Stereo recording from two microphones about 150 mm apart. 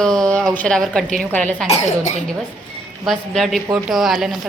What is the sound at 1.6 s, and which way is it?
Speech, 50° left (ahead or behind).